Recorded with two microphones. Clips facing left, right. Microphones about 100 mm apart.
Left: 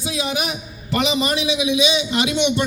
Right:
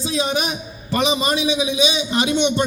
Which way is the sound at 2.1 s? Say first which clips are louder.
Right 1 dB; 30° right (ahead or behind).